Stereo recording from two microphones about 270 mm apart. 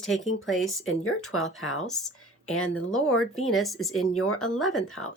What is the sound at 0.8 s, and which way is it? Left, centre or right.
Speech, left.